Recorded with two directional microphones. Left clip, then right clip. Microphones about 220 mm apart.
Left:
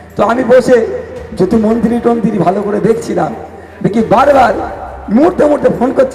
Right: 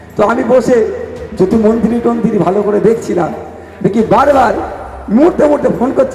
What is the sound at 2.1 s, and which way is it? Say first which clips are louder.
Speech: left 2 dB; 30° left (ahead or behind).